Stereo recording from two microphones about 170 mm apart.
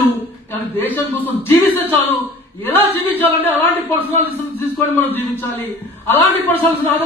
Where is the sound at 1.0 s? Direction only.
10° left (ahead or behind).